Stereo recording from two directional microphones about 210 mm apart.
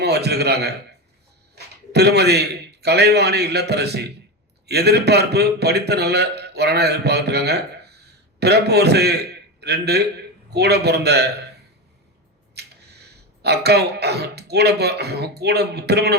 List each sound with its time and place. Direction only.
0.0 s a man's voice: 50° right (ahead or behind)
12.5 s a sound: 50° right (ahead or behind)
13.4 s speech: 50° right (ahead or behind)